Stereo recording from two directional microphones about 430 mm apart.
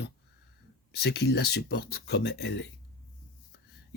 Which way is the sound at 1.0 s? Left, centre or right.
Left.